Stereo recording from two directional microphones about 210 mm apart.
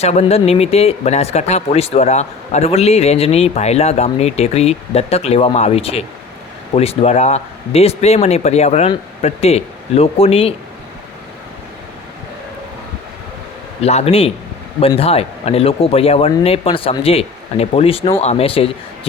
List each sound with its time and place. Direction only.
0.0 s speech: 30° left (ahead or behind)
13.8 s speech: 30° left (ahead or behind)